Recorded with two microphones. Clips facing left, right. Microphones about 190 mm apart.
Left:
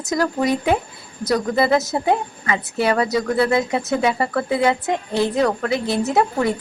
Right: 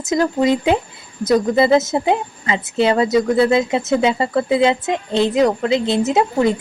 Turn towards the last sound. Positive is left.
turn(degrees=-20)  # may be behind; listen again after turning